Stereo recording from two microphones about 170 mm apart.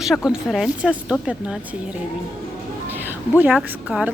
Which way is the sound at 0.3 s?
Centre (ahead or behind).